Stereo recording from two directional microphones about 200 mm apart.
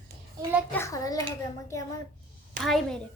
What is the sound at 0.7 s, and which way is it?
A child's voice, 15° left (ahead or behind).